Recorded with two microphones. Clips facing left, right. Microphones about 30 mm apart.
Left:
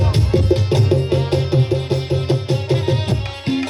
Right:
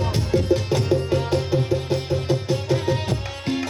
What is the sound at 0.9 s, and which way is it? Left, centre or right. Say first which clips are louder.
Music: left 3 dB; left.